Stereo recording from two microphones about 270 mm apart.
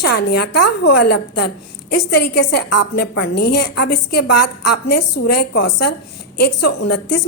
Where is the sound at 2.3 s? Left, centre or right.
Left.